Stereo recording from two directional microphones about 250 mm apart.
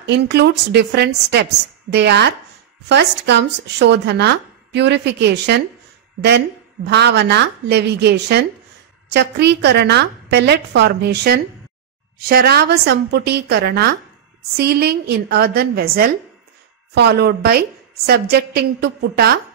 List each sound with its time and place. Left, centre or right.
0.0 s a woman's voice: right